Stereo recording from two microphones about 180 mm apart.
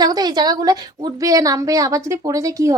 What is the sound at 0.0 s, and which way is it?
A woman's voice, 20° right (ahead or behind).